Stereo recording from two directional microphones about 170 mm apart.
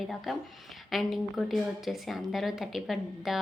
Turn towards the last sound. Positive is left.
turn(degrees=0)  # may be behind; listen again after turning